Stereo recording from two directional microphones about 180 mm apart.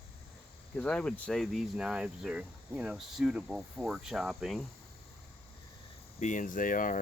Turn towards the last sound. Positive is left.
turn(degrees=50)  # may be behind; listen again after turning